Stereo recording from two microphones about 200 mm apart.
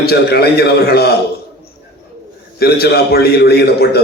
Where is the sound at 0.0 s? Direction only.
50° left (ahead or behind).